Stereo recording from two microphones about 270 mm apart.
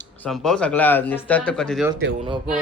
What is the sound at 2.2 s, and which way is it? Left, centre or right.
Speech, centre.